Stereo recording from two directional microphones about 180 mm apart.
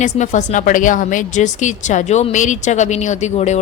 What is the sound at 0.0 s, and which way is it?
A man's voice, 40° left (ahead or behind).